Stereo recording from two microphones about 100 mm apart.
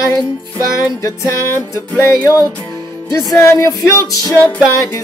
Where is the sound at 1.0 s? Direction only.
30° left (ahead or behind).